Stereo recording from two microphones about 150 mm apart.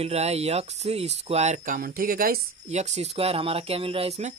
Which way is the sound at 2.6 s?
50° right (ahead or behind).